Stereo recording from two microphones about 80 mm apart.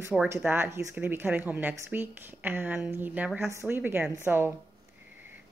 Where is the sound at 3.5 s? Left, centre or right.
Right.